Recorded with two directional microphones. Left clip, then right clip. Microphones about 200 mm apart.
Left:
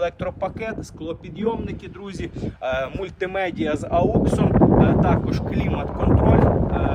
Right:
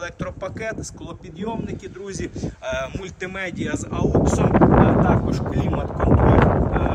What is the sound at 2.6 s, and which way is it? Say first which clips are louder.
Speech: left 3 dB; 25° left (ahead or behind).